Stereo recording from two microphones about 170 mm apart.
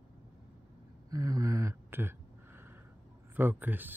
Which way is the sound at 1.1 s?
20° right (ahead or behind).